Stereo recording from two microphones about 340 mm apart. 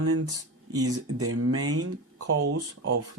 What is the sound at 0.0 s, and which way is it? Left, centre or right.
Speech, right.